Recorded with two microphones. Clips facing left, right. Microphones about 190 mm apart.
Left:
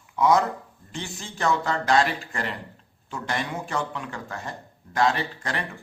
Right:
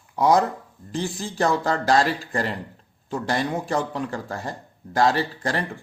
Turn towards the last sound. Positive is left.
turn(degrees=-35)  # may be behind; listen again after turning